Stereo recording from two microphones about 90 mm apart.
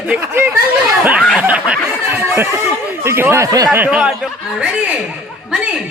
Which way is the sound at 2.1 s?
30° right (ahead or behind).